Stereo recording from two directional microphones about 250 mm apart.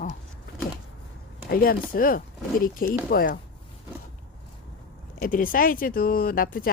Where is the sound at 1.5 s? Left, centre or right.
Left.